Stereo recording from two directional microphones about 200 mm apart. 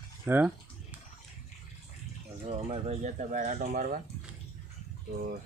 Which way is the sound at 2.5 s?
30° right (ahead or behind).